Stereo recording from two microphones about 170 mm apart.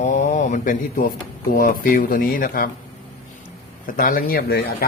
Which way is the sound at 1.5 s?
55° left (ahead or behind).